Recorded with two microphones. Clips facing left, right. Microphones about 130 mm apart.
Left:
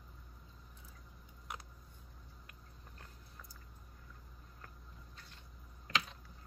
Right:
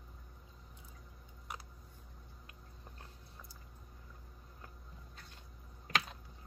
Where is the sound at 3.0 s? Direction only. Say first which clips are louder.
Right 1 dB; 25° right (ahead or behind).